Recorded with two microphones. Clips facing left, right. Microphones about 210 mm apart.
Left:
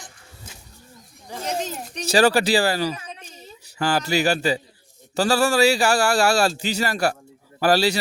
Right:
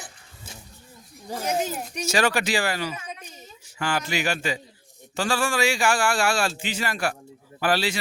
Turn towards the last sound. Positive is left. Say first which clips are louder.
# left 5 dB
turn(degrees=40)  # may be behind; listen again after turning